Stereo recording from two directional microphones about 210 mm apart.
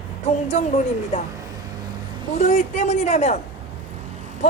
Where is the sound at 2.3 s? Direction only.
30° left (ahead or behind).